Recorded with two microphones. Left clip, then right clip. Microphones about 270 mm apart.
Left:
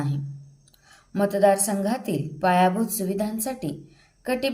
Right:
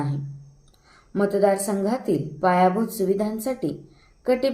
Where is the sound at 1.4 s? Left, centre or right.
Left.